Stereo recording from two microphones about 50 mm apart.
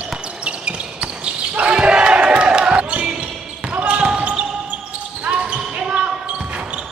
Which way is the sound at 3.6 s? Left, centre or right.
Right.